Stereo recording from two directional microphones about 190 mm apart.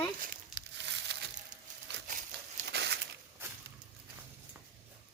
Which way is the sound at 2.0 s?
40° right (ahead or behind).